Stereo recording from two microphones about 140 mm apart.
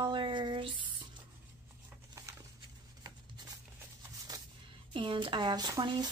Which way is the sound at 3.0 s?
30° right (ahead or behind).